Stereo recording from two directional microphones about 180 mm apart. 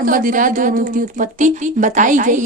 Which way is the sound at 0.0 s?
50° right (ahead or behind).